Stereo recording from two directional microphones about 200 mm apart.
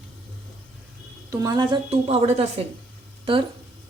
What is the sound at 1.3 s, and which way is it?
A woman's voice, 20° right (ahead or behind).